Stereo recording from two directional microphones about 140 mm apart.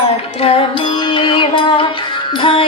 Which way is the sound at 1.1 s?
35° left (ahead or behind).